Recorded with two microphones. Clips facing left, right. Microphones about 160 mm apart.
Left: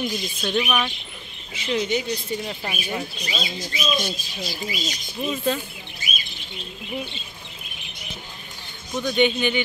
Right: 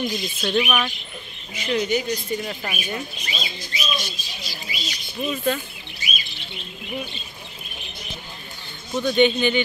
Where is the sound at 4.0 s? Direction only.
50° left (ahead or behind).